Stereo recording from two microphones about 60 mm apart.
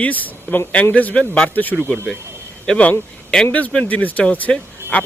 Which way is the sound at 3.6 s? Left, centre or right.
Left.